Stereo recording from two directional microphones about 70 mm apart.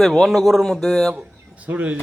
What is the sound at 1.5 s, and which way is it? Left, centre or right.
Speech, centre.